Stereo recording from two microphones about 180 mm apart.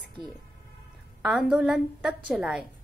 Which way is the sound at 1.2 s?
5° right (ahead or behind).